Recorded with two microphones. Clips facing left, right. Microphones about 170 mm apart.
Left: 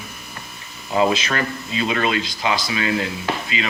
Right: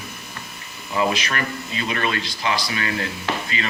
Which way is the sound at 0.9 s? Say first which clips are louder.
Left 4 dB; 25° left (ahead or behind).